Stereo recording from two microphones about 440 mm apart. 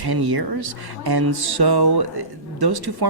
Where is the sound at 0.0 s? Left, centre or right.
Right.